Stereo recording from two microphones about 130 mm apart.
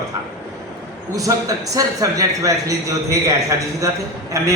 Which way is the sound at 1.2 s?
25° right (ahead or behind).